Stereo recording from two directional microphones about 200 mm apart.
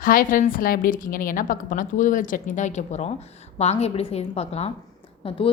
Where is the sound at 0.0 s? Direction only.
45° left (ahead or behind).